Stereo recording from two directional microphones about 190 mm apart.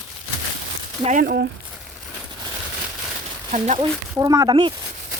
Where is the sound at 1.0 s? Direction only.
40° right (ahead or behind).